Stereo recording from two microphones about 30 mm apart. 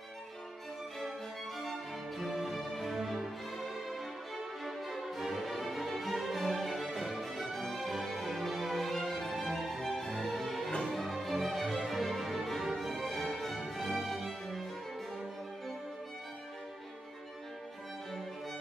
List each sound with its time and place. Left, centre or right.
2.4 s music: centre